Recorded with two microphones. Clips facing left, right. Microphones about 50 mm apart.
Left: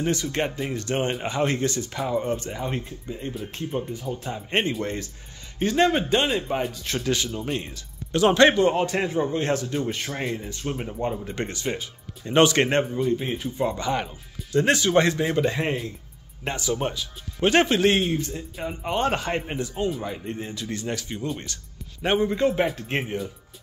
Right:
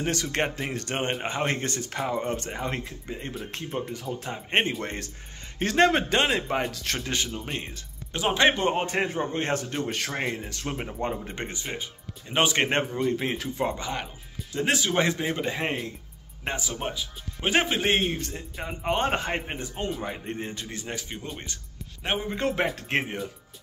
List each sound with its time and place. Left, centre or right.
0.0 s speech: right
4.2 s a man's voice: right
7.0 s a man's voice: right; by 8.5 s centre
8.5 s a man's voice: right
10.5 s speech: right
10.9 s speech: right
11.4 s speech: centre
12.9 s speech: right
13.7 s speech: centre
15.0 s a man's voice: centre; by 20.6 s right
20.6 s speech: centre
22.0 s speech: centre
22.8 s speech: right